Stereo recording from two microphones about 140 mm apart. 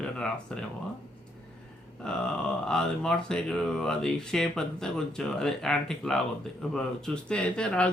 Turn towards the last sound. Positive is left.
turn(degrees=10)  # may be behind; listen again after turning